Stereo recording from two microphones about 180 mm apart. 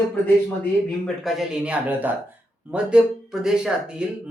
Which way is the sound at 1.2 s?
5° right (ahead or behind).